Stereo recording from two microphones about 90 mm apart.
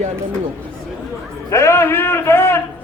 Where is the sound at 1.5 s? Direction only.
30° left (ahead or behind).